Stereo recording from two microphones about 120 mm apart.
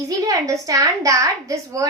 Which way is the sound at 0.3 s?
30° right (ahead or behind).